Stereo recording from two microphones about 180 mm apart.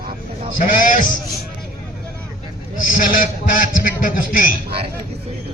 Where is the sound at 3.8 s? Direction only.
50° left (ahead or behind).